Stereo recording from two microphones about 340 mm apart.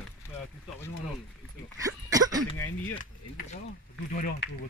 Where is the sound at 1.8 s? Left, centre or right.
Centre.